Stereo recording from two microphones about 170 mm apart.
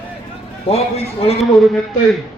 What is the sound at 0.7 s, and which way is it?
Speech, 35° left (ahead or behind).